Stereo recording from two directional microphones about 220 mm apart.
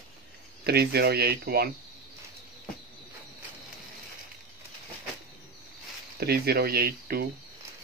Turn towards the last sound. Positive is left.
turn(degrees=-45)  # may be behind; listen again after turning